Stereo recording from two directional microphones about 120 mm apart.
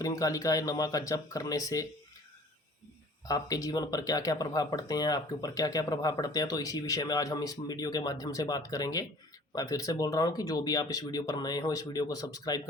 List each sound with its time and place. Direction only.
0.0 s speech: 30° left (ahead or behind)
3.2 s speech: 30° left (ahead or behind)